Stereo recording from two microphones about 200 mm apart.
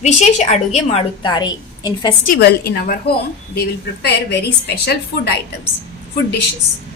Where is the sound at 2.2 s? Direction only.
50° left (ahead or behind).